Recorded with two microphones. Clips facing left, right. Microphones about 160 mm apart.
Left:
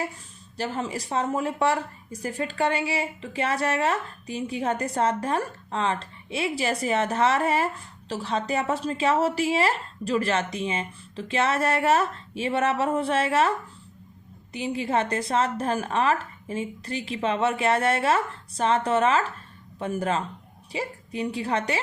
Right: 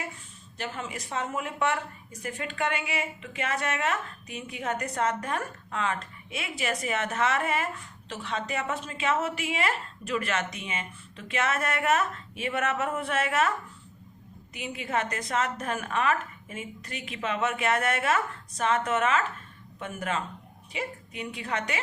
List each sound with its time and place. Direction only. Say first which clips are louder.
0.5 s a woman's voice: left 6 dB; 35° left (ahead or behind)
14.5 s a woman's voice: left 5 dB; 30° left (ahead or behind)